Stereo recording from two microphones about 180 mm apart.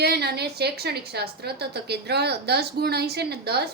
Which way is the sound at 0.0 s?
65° right (ahead or behind).